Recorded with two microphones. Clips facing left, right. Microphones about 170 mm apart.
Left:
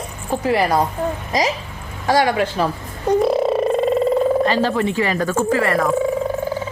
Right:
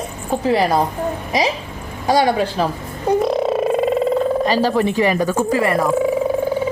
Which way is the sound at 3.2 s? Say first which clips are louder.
Left 1 dB; centre (ahead or behind).